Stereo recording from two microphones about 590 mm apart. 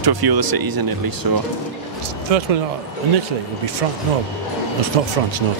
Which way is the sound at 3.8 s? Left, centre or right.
Right.